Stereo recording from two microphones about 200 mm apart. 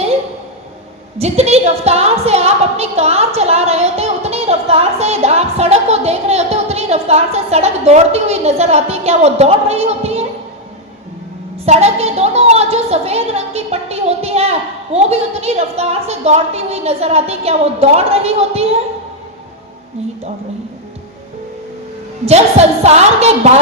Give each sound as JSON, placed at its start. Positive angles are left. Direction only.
{"t": 1.2, "sound": "a woman's voice", "side_deg": -30}
{"t": 11.6, "sound": "a woman's voice", "side_deg": -30}
{"t": 22.3, "sound": "a woman's voice", "side_deg": -35}